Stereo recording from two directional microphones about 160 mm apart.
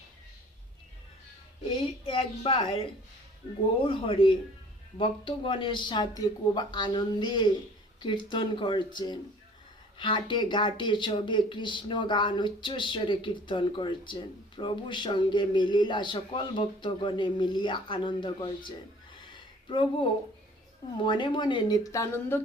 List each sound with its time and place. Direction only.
2.0 s a woman's voice: 35° left (ahead or behind)
3.8 s a woman's voice: 35° left (ahead or behind)
19.1 s a sound: 30° left (ahead or behind)
21.0 s speech: 30° left (ahead or behind)